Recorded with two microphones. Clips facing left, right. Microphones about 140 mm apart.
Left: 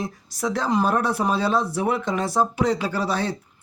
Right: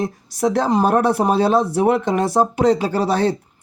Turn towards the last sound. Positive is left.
turn(degrees=-55)  # may be behind; listen again after turning